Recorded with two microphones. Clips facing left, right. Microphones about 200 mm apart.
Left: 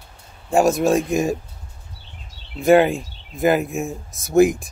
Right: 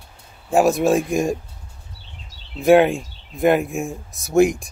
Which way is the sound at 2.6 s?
Centre (ahead or behind).